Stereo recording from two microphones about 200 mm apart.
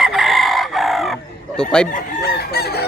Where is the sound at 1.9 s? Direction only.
50° left (ahead or behind).